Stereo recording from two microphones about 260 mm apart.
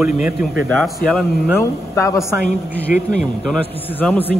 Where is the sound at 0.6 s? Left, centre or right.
Centre.